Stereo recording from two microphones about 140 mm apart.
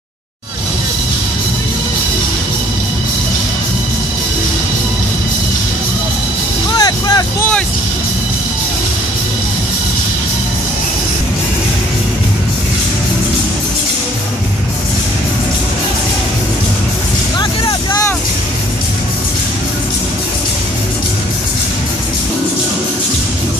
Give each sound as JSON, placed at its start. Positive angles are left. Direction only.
{"t": 6.8, "sound": "vehicle", "side_deg": 25}
{"t": 17.4, "sound": "vehicle", "side_deg": 25}